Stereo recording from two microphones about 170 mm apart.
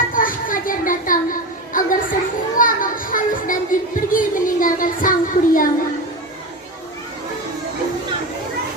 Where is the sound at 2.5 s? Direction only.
55° left (ahead or behind).